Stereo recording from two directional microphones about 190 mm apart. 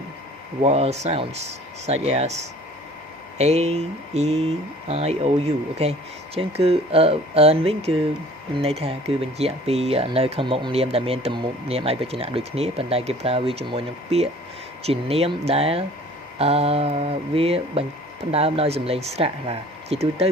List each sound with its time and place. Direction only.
0.6 s speech: 35° right (ahead or behind)